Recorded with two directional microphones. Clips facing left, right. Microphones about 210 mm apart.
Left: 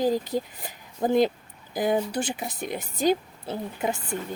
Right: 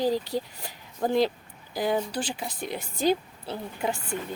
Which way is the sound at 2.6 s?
50° left (ahead or behind).